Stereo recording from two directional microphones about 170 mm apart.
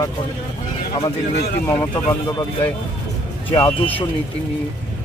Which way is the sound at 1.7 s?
20° left (ahead or behind).